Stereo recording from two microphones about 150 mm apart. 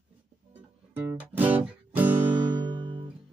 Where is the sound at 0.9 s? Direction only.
10° right (ahead or behind).